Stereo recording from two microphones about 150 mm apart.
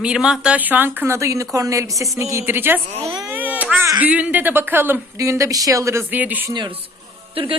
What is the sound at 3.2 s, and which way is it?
Babbling, 10° right (ahead or behind).